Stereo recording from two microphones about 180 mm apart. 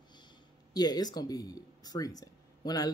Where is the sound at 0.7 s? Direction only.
20° left (ahead or behind).